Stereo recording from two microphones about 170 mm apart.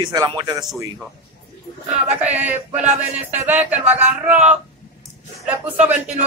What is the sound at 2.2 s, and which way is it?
Speech, 10° right (ahead or behind).